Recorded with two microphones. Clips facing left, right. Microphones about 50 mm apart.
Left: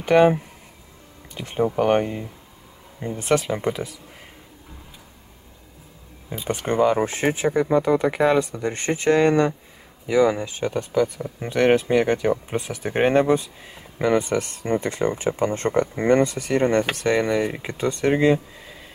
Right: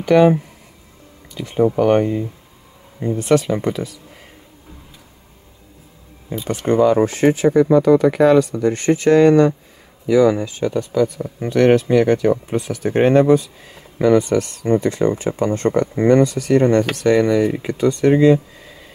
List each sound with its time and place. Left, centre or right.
0.0 s speech: left
1.3 s speech: left
1.8 s speech: centre
6.3 s speech: centre; by 10.9 s left
11.4 s speech: centre